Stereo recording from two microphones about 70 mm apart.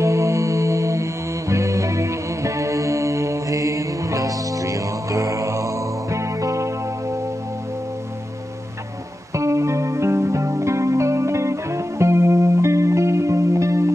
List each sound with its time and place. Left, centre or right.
0.0 s music: right
9.3 s music: right